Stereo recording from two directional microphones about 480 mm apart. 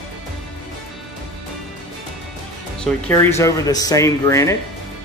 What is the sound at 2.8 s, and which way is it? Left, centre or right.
Speech, centre.